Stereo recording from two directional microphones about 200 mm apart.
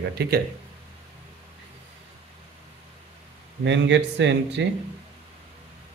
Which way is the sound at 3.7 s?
65° right (ahead or behind).